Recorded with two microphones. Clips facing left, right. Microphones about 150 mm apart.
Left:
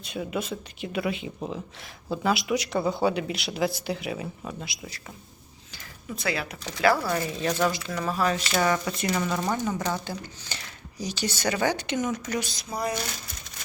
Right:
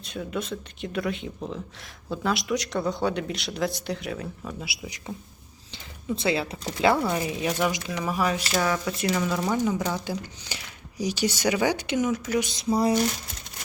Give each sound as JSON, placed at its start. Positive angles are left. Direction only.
{"t": 0.0, "sound": "speech", "side_deg": 5}
{"t": 4.6, "sound": "speech", "side_deg": -10}
{"t": 5.7, "sound": "a woman's voice", "side_deg": -25}
{"t": 12.4, "sound": "a sound", "side_deg": -20}